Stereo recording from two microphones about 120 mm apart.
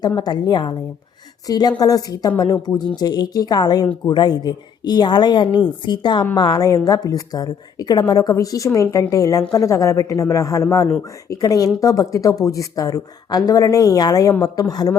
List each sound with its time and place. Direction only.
0.2 s a woman's voice: 35° left (ahead or behind)